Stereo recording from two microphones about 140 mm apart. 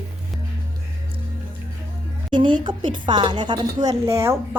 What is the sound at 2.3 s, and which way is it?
Speech, 35° right (ahead or behind).